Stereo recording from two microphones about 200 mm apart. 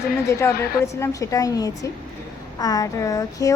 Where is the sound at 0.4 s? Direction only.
15° left (ahead or behind).